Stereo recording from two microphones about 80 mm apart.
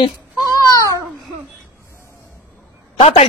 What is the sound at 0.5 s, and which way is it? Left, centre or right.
Babbling, left.